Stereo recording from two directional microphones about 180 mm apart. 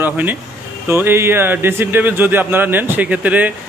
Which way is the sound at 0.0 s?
10° right (ahead or behind).